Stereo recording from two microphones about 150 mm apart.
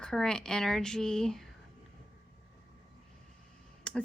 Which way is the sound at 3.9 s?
5° left (ahead or behind).